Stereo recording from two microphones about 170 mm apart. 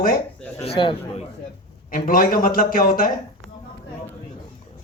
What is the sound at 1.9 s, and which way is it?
A man's voice, 55° left (ahead or behind).